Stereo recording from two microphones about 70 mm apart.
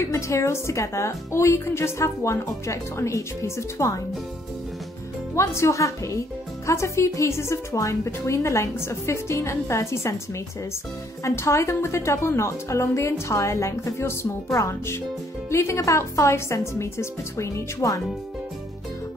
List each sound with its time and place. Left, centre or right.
0.0 s a woman's voice: left
5.3 s a woman's voice: left
11.2 s a woman's voice: left